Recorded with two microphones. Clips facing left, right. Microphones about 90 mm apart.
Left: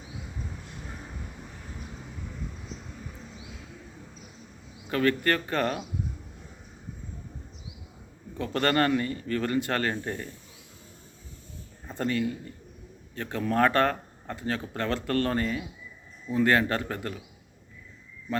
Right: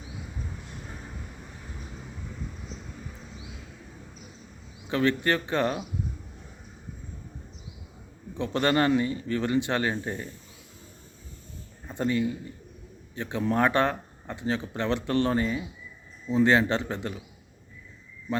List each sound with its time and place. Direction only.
4.9 s speech: 20° right (ahead or behind)
8.4 s speech: 15° right (ahead or behind)
11.9 s speech: 15° right (ahead or behind)